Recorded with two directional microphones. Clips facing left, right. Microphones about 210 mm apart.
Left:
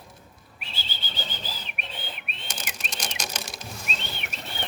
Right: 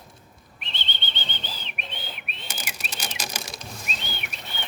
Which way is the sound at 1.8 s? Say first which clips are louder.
Even; centre (ahead or behind).